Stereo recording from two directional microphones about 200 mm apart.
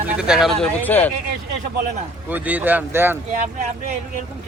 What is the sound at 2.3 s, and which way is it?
Speech, 10° right (ahead or behind).